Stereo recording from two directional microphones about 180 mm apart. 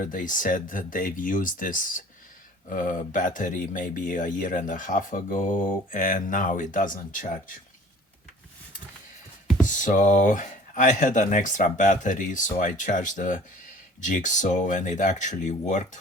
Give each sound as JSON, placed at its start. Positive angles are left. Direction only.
{"t": 0.0, "sound": "speech", "side_deg": 45}
{"t": 9.6, "sound": "speech", "side_deg": 45}